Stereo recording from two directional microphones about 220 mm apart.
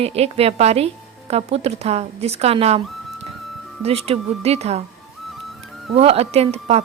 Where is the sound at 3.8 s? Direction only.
30° right (ahead or behind).